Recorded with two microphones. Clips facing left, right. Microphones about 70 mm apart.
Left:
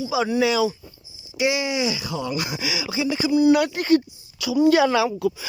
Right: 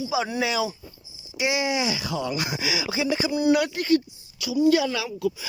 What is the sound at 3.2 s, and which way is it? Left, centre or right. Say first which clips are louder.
Speech: left 9 dB; right.